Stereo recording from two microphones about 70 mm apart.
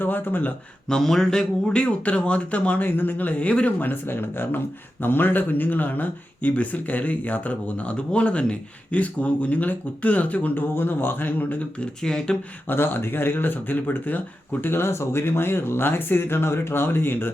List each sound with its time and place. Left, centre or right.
0.0 s speech: left
0.9 s speech: centre; by 11.9 s left
12.0 s speech: centre
12.6 s speech: left